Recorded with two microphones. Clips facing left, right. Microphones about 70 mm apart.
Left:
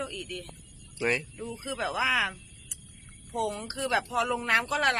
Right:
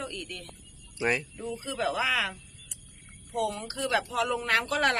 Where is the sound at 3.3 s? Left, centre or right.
Left; by 5.0 s centre.